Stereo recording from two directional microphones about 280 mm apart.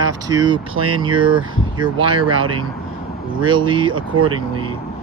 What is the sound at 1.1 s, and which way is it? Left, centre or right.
Speech, centre.